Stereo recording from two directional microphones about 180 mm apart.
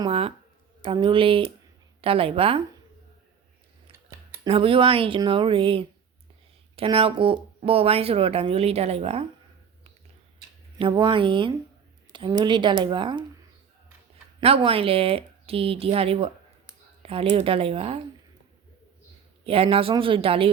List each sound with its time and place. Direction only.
0.0 s speech: 30° right (ahead or behind)
4.4 s speech: 30° right (ahead or behind)
10.8 s speech: 25° right (ahead or behind)
14.4 s speech: 30° right (ahead or behind)
19.5 s speech: 30° right (ahead or behind)